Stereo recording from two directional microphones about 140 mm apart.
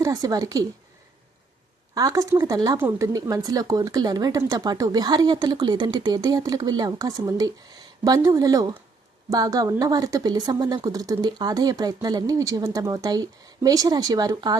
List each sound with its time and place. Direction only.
0.0 s speech: 25° right (ahead or behind)
2.0 s speech: 25° right (ahead or behind)